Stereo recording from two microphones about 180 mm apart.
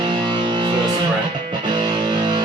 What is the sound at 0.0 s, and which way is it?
Music, 25° right (ahead or behind).